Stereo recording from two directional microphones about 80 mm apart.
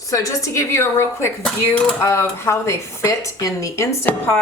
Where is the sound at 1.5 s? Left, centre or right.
Centre.